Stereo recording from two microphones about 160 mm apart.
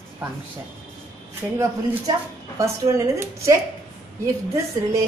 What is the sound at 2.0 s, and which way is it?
A woman's voice, 20° right (ahead or behind).